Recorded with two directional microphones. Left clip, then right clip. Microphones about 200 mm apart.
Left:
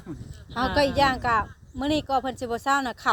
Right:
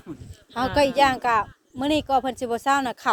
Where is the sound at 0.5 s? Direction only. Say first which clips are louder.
Right 2 dB; 20° right (ahead or behind).